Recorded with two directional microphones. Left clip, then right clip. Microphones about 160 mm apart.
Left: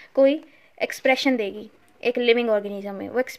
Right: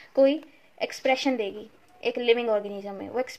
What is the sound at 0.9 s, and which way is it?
Speech, 40° left (ahead or behind).